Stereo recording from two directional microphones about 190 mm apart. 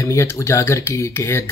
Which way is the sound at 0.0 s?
15° left (ahead or behind).